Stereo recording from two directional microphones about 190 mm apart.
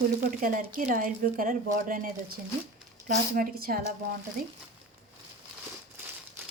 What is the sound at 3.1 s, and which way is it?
Speech, 50° right (ahead or behind).